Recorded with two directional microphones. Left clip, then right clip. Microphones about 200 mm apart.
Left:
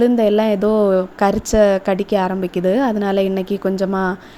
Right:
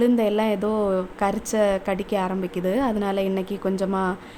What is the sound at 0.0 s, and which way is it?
A woman's voice, 20° left (ahead or behind).